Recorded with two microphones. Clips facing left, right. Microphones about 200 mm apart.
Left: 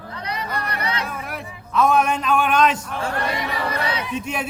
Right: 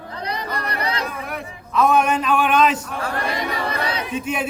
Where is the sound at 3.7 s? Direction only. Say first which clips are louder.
Even; 30° right (ahead or behind).